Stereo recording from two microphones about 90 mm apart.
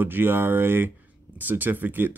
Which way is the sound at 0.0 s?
25° right (ahead or behind).